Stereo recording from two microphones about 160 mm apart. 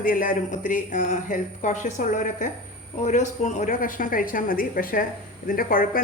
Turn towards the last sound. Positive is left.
turn(degrees=60)  # may be behind; listen again after turning